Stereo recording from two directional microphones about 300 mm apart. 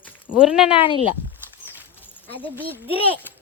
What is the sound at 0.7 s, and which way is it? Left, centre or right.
Speech, centre.